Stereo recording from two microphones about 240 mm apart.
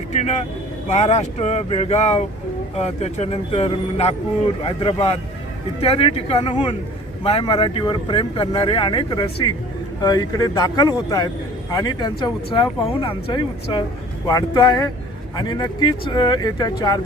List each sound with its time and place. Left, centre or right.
0.9 s speech: left